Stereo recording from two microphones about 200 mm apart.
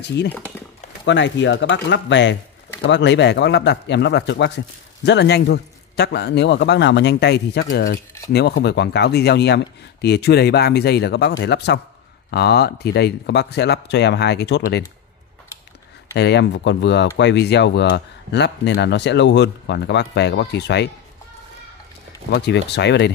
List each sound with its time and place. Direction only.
0.0 s speech: 60° left (ahead or behind)
16.1 s speech: 60° left (ahead or behind)
22.3 s speech: 60° left (ahead or behind)